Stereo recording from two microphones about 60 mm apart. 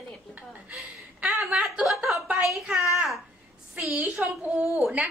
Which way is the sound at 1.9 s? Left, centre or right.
Centre.